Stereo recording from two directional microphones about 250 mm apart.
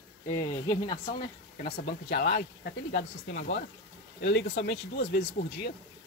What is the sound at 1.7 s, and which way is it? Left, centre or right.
Speech, left.